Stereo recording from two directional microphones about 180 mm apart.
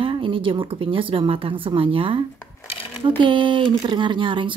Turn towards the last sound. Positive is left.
turn(degrees=-25)  # may be behind; listen again after turning